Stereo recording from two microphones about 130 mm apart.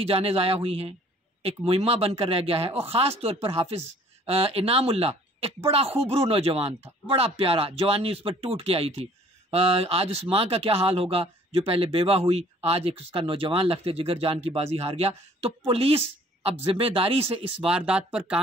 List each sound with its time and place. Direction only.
0.0 s speech: 50° right (ahead or behind)
17.6 s speech: 10° right (ahead or behind)